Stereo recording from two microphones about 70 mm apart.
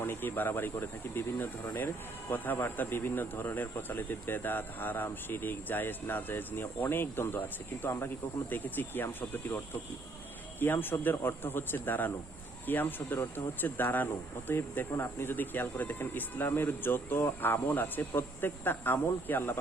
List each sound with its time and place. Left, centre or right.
0.0 s speech: left
10.6 s speech: left